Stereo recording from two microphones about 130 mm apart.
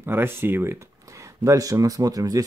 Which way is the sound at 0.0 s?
15° right (ahead or behind).